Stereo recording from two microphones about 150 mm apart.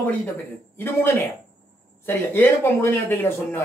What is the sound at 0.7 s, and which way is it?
Speech, 15° left (ahead or behind).